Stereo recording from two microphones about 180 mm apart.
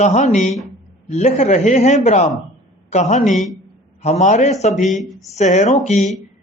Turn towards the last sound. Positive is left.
turn(degrees=40)  # may be behind; listen again after turning